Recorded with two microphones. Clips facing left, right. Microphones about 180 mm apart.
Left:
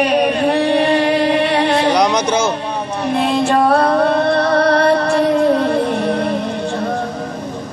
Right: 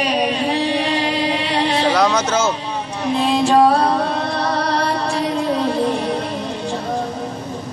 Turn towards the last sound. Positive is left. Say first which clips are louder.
# left 3 dB
turn(degrees=60)  # may be behind; listen again after turning